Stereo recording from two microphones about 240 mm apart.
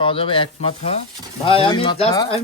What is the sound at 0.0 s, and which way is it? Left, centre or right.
Speech, left.